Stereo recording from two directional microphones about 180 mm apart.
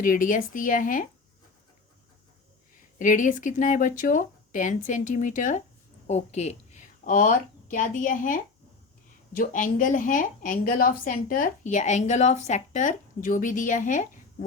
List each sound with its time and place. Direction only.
0.0 s a woman's voice: 50° left (ahead or behind)
3.0 s a woman's voice: 45° left (ahead or behind)